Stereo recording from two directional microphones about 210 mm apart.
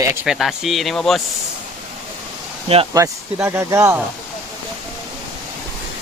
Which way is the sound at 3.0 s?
15° right (ahead or behind).